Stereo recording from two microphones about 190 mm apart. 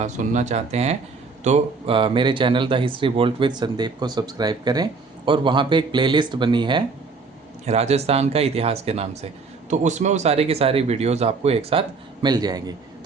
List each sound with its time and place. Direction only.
0.0 s speech: 35° right (ahead or behind)
7.6 s speech: 35° right (ahead or behind)